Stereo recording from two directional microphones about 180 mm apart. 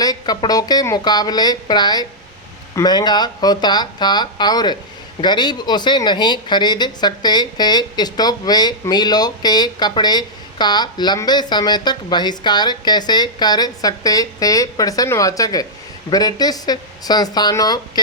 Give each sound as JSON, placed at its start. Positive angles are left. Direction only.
{"t": 0.0, "sound": "a woman's voice", "side_deg": 20}